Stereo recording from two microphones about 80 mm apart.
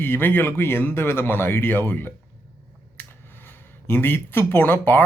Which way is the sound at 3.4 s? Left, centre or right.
Left.